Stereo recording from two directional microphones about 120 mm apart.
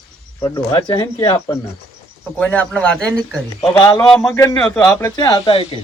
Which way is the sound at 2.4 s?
10° left (ahead or behind).